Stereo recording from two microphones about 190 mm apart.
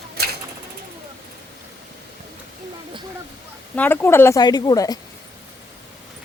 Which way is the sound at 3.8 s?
10° left (ahead or behind).